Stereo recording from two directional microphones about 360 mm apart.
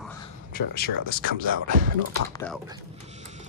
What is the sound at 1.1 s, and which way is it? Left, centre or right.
Speech, right.